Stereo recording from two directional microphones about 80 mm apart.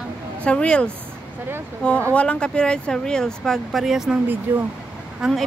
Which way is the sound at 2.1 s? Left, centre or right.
Centre.